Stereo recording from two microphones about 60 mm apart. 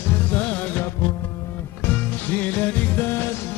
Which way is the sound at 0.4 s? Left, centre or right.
Left.